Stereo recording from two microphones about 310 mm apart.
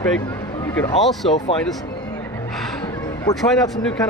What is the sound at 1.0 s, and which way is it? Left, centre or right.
Speech, centre.